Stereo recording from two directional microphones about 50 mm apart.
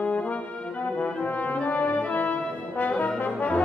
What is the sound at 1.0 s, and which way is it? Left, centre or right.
Brass instrument, left.